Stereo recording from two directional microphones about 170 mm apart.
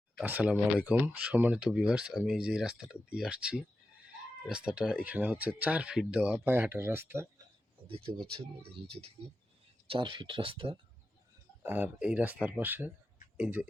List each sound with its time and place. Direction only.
0.2 s speech: 10° right (ahead or behind)
7.9 s speech: 35° right (ahead or behind)
11.6 s speech: 10° right (ahead or behind)